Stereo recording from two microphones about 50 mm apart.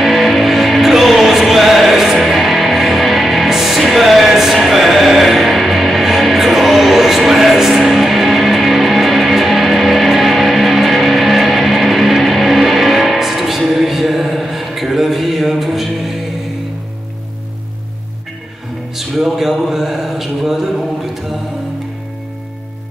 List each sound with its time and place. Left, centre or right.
0.0 s music: centre
18.9 s music: centre